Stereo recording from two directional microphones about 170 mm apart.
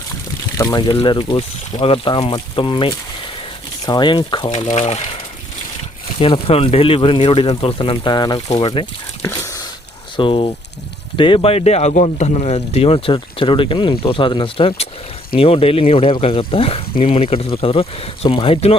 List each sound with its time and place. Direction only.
0.5 s speech: 20° left (ahead or behind)
4.5 s speech: 45° left (ahead or behind)
6.1 s speech: 35° left (ahead or behind)
9.2 s a sound: 20° left (ahead or behind)
10.2 s speech: 30° left (ahead or behind)